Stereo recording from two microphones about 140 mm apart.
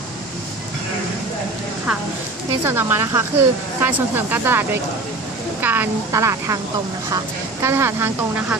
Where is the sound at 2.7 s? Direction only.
15° right (ahead or behind).